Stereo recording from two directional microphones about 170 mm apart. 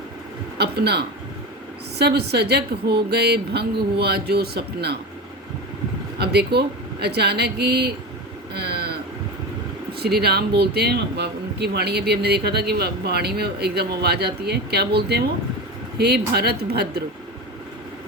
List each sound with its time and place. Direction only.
0.6 s speech: 75° right (ahead or behind)
6.1 s speech: 75° right (ahead or behind)
8.5 s a sound: 70° right (ahead or behind)
10.0 s speech: 70° right (ahead or behind)